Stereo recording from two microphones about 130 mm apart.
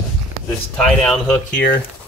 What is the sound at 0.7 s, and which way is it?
Speech, 5° left (ahead or behind).